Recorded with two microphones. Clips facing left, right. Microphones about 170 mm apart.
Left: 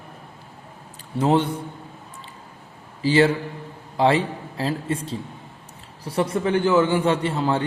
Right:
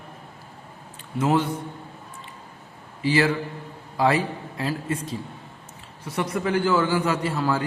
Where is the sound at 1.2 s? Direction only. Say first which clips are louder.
Left 2 dB; 30° left (ahead or behind).